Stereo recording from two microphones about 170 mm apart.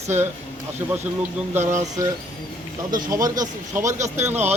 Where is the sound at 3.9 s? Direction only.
45° right (ahead or behind).